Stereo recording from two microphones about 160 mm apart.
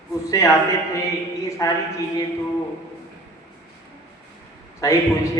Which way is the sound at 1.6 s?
25° left (ahead or behind).